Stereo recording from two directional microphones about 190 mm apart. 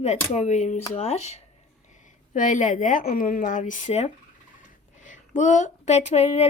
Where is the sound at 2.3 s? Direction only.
40° left (ahead or behind).